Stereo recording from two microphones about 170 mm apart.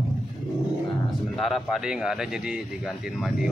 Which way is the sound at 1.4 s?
Centre (ahead or behind).